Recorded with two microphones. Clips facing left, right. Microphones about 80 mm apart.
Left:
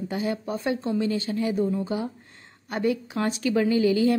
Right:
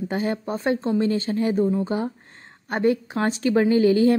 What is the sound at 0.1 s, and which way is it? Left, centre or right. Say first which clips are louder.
Speech: right 2 dB; right.